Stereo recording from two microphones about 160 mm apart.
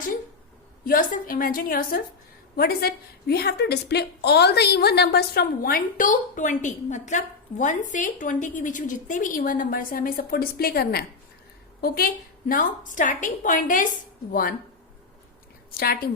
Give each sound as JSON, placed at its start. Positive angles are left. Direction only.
{"t": 0.9, "sound": "a woman's voice", "side_deg": 60}